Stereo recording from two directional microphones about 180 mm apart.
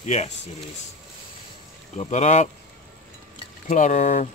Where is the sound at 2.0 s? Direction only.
40° left (ahead or behind).